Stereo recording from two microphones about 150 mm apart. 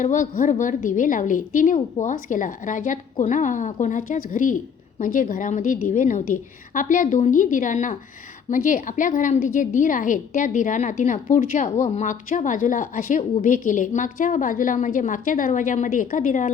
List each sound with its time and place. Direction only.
0.0 s a woman's voice: 60° left (ahead or behind)